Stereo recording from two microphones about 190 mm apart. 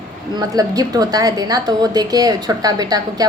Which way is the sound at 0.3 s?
20° right (ahead or behind).